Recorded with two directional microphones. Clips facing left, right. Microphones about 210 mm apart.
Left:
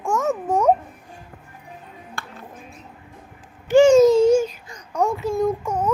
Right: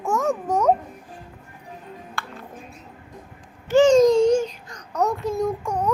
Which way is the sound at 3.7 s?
10° left (ahead or behind).